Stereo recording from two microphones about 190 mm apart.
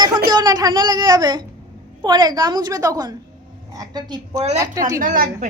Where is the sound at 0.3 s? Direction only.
20° right (ahead or behind).